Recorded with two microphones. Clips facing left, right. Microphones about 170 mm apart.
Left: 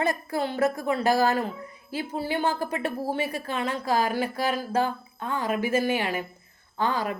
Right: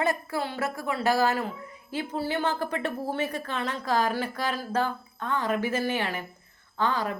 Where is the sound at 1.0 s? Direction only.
15° left (ahead or behind).